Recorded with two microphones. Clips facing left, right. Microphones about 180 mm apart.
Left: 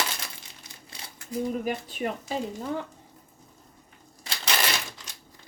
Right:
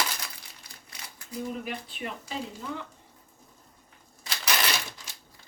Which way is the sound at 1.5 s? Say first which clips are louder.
Left 6 dB; 45° left (ahead or behind).